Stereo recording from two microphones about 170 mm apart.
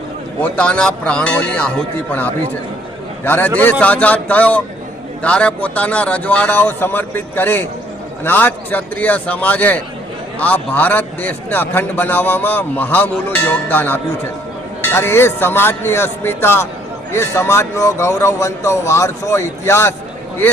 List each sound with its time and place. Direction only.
0.3 s a man's voice: 10° left (ahead or behind)